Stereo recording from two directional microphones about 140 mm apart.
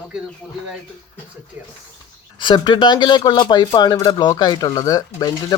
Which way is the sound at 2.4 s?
35° left (ahead or behind).